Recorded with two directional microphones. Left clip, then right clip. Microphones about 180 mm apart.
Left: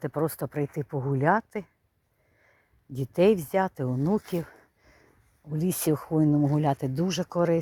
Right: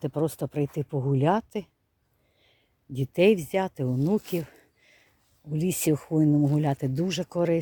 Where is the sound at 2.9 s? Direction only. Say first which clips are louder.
Right 1 dB; 25° right (ahead or behind).